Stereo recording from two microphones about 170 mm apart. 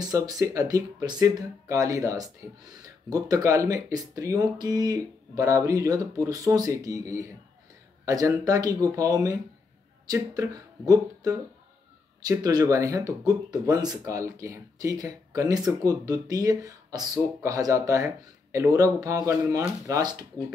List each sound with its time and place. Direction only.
0.0 s speech: 20° right (ahead or behind)